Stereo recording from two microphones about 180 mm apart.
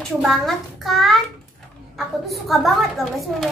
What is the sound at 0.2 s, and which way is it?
A woman's voice, centre (ahead or behind).